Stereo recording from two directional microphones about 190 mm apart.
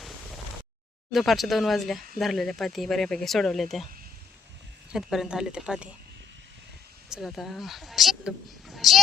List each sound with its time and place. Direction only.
1.1 s speech: centre (ahead or behind)
4.9 s speech: centre (ahead or behind)
7.1 s speech: centre (ahead or behind)